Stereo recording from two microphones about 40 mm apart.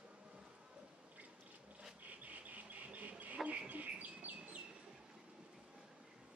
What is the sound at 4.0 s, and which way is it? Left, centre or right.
Bird, right.